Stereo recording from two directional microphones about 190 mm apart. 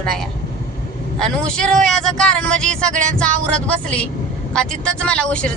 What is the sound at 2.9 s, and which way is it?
Speech, 40° right (ahead or behind).